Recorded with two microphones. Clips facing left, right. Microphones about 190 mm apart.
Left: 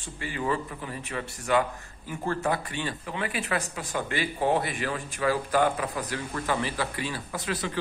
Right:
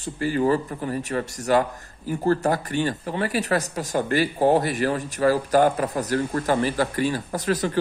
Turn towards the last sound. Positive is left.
turn(degrees=-40)  # may be behind; listen again after turning